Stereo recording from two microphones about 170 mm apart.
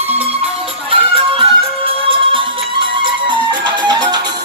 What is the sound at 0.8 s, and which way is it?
Music, 35° right (ahead or behind).